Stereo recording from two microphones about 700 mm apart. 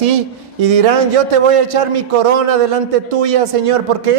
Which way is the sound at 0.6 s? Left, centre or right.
Right.